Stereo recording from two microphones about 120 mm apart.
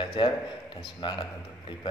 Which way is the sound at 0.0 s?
40° left (ahead or behind).